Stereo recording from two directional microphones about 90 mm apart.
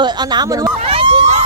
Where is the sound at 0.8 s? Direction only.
90° right.